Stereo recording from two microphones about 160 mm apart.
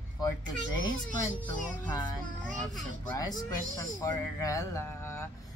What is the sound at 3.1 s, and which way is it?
A man's voice, 25° left (ahead or behind).